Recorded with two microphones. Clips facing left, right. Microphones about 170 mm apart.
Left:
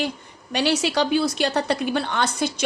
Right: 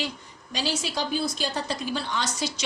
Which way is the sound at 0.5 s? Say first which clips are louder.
Left 8 dB; 70° left (ahead or behind).